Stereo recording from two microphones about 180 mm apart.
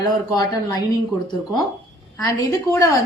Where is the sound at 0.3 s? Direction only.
20° left (ahead or behind).